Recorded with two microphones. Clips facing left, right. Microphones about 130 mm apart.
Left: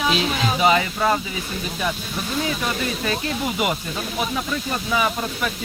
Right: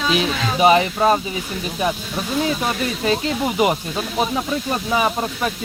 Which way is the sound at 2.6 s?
30° right (ahead or behind).